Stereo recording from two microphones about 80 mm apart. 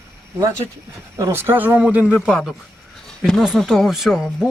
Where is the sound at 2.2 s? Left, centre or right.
Centre.